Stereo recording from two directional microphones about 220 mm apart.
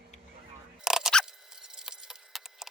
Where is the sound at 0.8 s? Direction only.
Centre (ahead or behind).